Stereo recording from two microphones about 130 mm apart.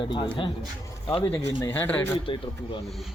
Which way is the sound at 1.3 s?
15° left (ahead or behind).